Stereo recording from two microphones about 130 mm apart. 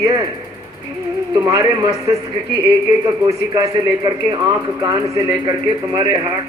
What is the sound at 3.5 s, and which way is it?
Speech, 30° right (ahead or behind).